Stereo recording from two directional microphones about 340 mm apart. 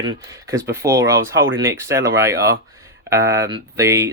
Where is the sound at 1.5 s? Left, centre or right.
Right.